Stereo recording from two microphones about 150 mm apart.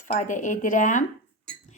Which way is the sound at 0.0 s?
55° left (ahead or behind).